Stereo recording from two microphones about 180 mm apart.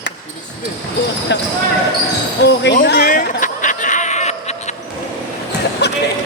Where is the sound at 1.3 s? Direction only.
75° left (ahead or behind).